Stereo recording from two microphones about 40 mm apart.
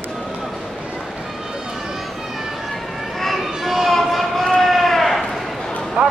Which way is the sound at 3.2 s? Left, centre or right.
Centre.